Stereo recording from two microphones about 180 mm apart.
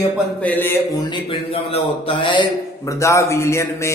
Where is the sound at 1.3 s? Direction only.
30° left (ahead or behind).